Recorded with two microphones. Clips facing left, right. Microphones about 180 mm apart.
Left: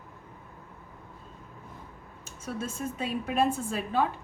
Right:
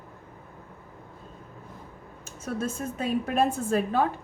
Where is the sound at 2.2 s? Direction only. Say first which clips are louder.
Right 4 dB; 45° right (ahead or behind).